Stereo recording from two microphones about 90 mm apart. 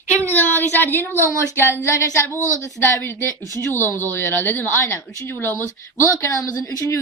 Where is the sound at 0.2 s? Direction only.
20° left (ahead or behind).